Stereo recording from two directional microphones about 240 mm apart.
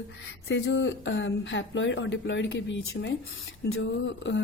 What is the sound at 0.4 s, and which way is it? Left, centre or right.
Speech, left.